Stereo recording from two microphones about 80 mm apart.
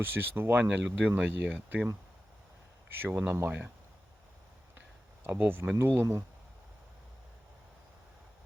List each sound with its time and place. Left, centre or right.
0.0 s speech: right
2.9 s speech: right
5.2 s speech: right